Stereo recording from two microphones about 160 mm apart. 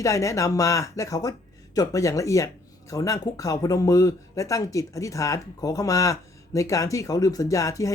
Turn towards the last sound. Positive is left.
turn(degrees=20)  # may be behind; listen again after turning